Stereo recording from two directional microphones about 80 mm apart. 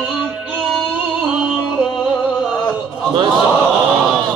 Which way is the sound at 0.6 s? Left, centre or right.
Centre.